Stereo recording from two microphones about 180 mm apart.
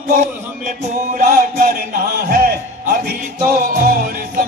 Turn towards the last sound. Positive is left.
turn(degrees=-55)  # may be behind; listen again after turning